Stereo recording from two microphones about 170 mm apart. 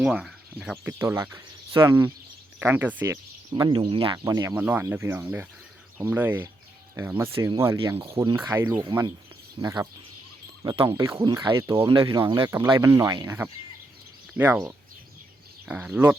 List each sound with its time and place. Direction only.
0.0 s speech: 5° right (ahead or behind)
1.7 s speech: 25° right (ahead or behind)
2.6 s speech: 10° right (ahead or behind)
3.5 s speech: 25° right (ahead or behind)
14.3 s speech: 15° right (ahead or behind)